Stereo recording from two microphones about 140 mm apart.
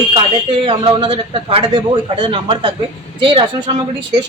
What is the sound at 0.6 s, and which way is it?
Speech, 40° right (ahead or behind).